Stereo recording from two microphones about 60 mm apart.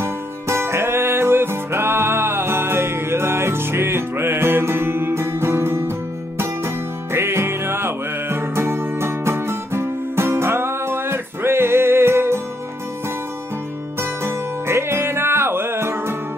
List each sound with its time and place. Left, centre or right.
0.0 s music: right
14.2 s music: right